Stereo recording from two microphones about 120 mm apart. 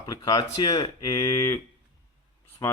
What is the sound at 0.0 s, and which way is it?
Speech, 30° left (ahead or behind).